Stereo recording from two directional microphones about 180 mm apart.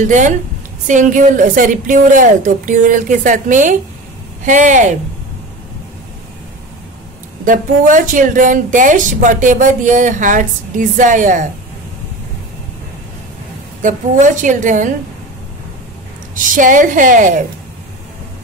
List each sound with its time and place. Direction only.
0.0 s speech: 45° right (ahead or behind)
7.4 s speech: 45° right (ahead or behind)
13.8 s speech: 45° right (ahead or behind)
16.4 s speech: 50° right (ahead or behind)